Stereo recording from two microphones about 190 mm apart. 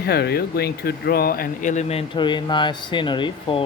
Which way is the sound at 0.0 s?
55° left (ahead or behind).